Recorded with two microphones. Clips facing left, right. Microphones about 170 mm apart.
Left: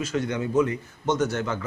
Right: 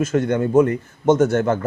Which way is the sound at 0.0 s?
50° right (ahead or behind).